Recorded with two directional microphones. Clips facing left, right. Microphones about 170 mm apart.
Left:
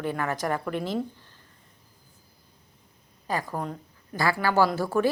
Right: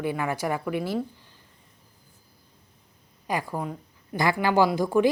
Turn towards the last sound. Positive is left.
turn(degrees=-15)  # may be behind; listen again after turning